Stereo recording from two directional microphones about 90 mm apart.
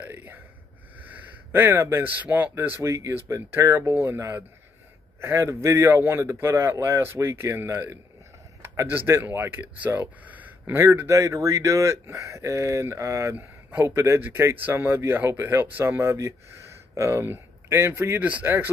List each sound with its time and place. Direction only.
0.0 s gasp: 20° right (ahead or behind)
0.9 s a man's voice: 20° right (ahead or behind)